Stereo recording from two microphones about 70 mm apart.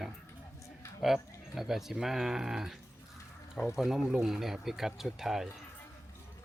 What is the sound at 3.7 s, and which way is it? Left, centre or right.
Speech, centre.